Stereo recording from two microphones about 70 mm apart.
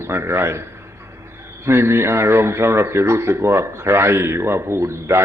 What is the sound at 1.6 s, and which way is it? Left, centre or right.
Speech, right.